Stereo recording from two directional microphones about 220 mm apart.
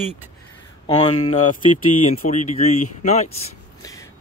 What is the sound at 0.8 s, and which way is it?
Speech, 25° left (ahead or behind).